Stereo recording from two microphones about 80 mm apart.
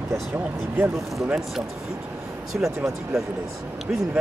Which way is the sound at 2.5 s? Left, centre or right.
Centre.